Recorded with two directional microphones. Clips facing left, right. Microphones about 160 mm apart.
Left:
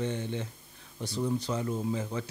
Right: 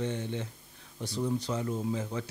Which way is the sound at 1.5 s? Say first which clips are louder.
Left 1 dB; 15° left (ahead or behind).